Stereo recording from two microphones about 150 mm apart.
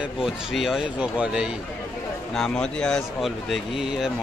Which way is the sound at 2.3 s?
5° left (ahead or behind).